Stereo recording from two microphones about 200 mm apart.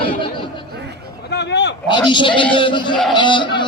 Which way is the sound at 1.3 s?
60° left (ahead or behind).